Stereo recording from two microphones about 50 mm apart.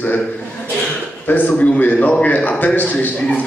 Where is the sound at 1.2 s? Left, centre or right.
Left.